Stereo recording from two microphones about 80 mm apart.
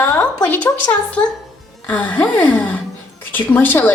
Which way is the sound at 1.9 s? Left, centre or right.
Centre.